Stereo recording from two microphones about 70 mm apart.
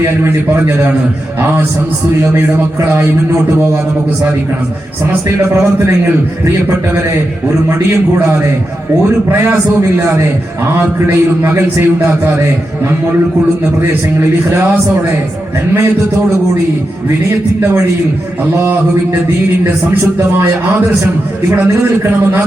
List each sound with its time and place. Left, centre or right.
10.8 s a man's voice: right